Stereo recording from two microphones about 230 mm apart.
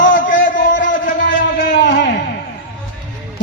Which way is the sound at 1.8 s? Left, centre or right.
Left.